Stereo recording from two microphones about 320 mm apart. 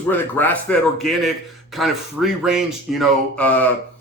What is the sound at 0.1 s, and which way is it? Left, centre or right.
Speech, centre.